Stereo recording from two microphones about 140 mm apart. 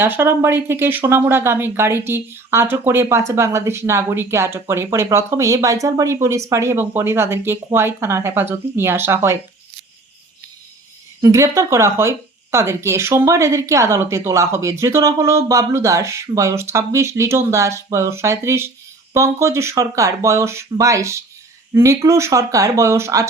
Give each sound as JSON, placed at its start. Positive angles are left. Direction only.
{"t": 0.0, "sound": "speech", "side_deg": -15}
{"t": 11.2, "sound": "speech", "side_deg": -20}